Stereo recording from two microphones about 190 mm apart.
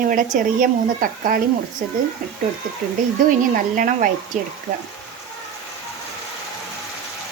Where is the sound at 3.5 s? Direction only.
45° right (ahead or behind).